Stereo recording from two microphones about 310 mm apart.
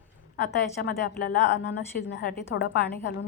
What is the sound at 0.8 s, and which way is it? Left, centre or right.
A woman's voice, left.